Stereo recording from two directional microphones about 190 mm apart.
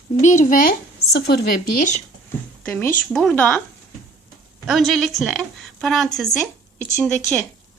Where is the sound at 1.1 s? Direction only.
60° left (ahead or behind).